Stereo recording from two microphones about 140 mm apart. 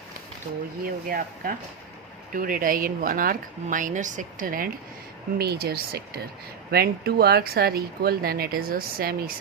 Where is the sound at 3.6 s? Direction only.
65° right (ahead or behind); by 4.7 s 85° right.